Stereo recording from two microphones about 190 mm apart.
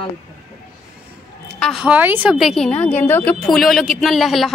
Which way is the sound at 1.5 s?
Centre (ahead or behind).